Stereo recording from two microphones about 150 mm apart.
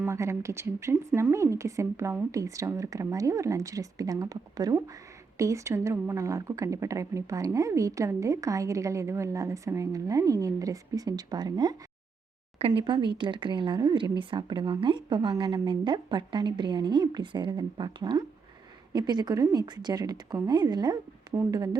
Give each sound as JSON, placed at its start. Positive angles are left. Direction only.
{"t": 0.1, "sound": "a woman's voice", "side_deg": -20}
{"t": 12.5, "sound": "a woman's voice", "side_deg": -40}